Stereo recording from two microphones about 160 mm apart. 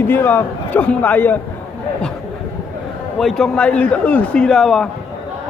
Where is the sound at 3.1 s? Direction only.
Centre (ahead or behind).